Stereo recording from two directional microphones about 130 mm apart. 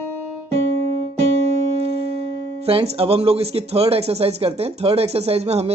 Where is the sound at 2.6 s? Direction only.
50° right (ahead or behind).